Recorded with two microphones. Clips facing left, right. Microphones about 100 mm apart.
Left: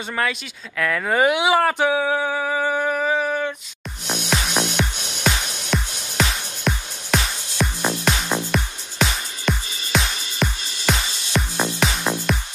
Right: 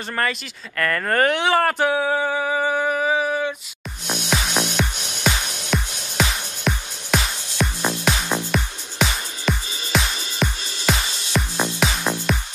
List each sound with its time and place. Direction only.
0.1 s speech: centre (ahead or behind)
1.9 s a sound: 5° right (ahead or behind)
4.3 s music: centre (ahead or behind)